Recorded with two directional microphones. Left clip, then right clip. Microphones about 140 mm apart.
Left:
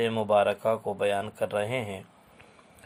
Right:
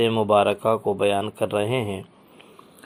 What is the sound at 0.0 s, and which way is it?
Speech, 5° right (ahead or behind).